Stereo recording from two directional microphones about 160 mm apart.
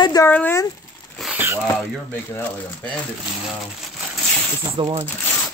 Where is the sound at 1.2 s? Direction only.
10° right (ahead or behind).